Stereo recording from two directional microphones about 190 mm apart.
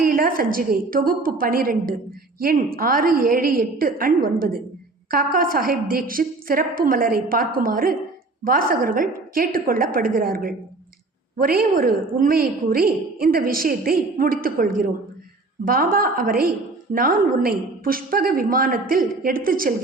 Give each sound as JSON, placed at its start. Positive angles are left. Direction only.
{"t": 0.0, "sound": "a woman's voice", "side_deg": -50}